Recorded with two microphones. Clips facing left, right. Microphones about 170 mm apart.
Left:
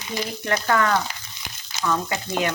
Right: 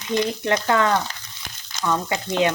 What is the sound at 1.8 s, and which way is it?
Speech, 15° right (ahead or behind).